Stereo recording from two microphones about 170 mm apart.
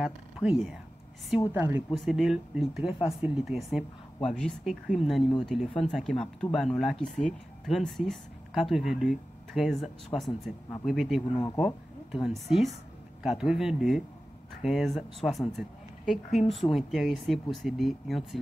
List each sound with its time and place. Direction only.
0.0 s a woman's voice: 5° right (ahead or behind)
2.0 s speech: centre (ahead or behind)
11.3 s speech: 20° left (ahead or behind)
11.6 s speech: centre (ahead or behind)